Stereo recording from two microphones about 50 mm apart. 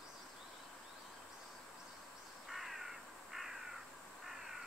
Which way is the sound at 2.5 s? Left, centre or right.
Centre.